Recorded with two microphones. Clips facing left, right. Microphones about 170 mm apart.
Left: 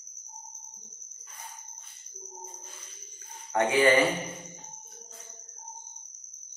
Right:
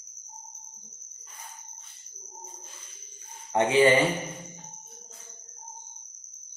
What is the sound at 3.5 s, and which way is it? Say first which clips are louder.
Speech: right 2 dB; 25° right (ahead or behind).